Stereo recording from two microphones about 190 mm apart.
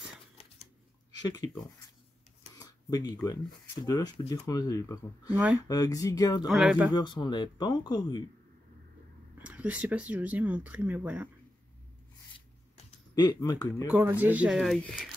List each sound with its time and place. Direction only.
1.2 s speech: 20° left (ahead or behind)
2.5 s speech: 20° left (ahead or behind)
6.4 s speech: centre (ahead or behind)
6.9 s speech: 25° left (ahead or behind)
9.4 s speech: 10° right (ahead or behind)
12.4 s a sound: 25° left (ahead or behind)
13.8 s speech: 10° right (ahead or behind)